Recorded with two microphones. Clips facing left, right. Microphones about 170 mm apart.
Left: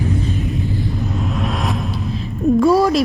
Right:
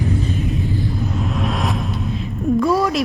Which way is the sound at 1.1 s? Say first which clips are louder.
Even; centre (ahead or behind).